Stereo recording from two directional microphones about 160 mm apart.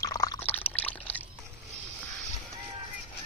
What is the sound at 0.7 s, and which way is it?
Pour, 10° left (ahead or behind).